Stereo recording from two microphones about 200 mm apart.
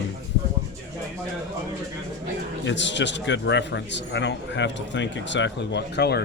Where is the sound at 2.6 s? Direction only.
65° left (ahead or behind).